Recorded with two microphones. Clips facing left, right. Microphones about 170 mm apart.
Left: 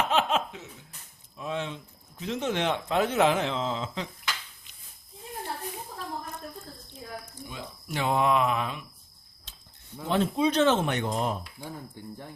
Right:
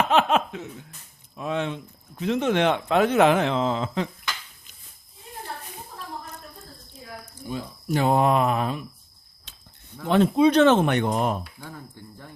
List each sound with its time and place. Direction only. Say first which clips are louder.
0.1 s laughter: right 5 dB; 60° right (ahead or behind)
1.4 s speech: right 5 dB; 65° right (ahead or behind)
7.5 s speech: right 9 dB; 40° right (ahead or behind)
10.1 s speech: right 7 dB; 65° right (ahead or behind)
12.0 s speech: left 3 dB; 15° left (ahead or behind)